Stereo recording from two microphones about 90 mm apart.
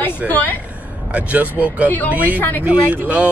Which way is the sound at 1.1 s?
15° right (ahead or behind).